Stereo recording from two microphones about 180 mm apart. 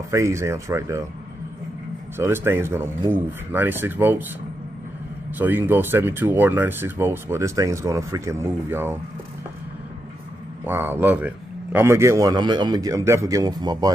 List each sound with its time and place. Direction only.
0.1 s speech: 15° right (ahead or behind)
2.1 s speech: 15° right (ahead or behind)
5.4 s speech: 10° right (ahead or behind)
10.6 s speech: 10° right (ahead or behind)